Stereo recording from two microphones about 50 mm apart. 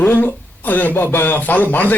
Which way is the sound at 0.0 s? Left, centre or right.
Left.